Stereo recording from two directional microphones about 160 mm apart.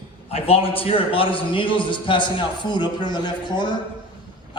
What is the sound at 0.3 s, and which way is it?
A man's voice, 35° left (ahead or behind).